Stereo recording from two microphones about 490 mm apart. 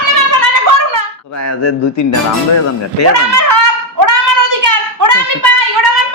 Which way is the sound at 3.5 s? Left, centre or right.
Right.